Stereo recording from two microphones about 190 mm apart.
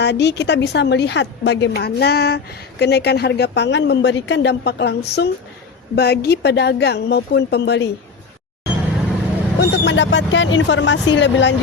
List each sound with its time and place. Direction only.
0.0 s a woman's voice: 65° left (ahead or behind)
9.6 s speech: 70° left (ahead or behind)